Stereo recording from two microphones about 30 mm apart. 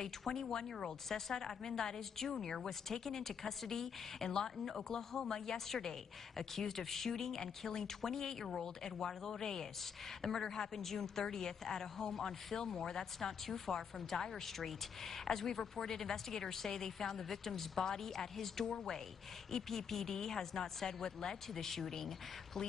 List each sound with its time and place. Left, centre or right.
0.0 s a woman's voice: centre